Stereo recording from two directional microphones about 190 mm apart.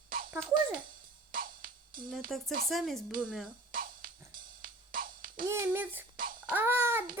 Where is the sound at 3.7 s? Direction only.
45° right (ahead or behind).